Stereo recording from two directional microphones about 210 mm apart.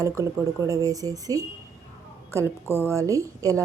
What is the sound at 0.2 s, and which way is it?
A woman's voice, 15° right (ahead or behind).